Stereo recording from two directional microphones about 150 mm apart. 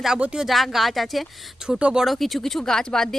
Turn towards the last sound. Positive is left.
turn(degrees=5)  # may be behind; listen again after turning